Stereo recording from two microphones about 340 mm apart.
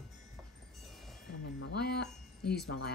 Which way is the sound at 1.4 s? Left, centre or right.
Left.